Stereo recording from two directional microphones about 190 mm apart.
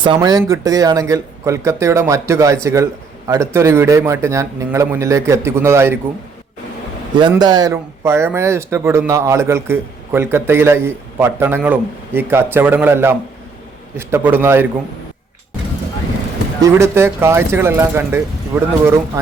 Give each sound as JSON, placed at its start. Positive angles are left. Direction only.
{"t": 0.0, "sound": "speech", "side_deg": -25}
{"t": 7.2, "sound": "speech", "side_deg": -25}
{"t": 16.6, "sound": "speech", "side_deg": -15}